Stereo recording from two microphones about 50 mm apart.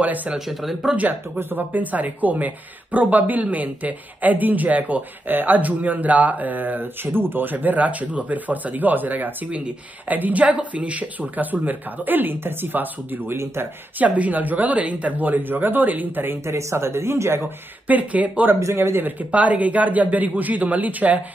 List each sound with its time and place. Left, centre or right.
0.0 s speech: right
0.5 s speech: centre
1.4 s speech: right
13.9 s speech: right
16.3 s a man's voice: right
17.8 s speech: right
18.8 s speech: right
19.3 s speech: right